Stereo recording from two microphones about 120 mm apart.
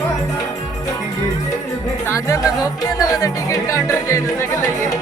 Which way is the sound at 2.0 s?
25° left (ahead or behind).